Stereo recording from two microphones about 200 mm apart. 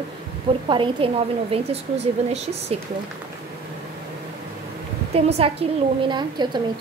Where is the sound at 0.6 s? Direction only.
25° right (ahead or behind).